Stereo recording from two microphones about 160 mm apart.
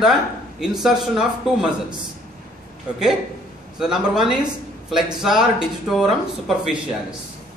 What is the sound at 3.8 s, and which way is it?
Speech, 5° right (ahead or behind).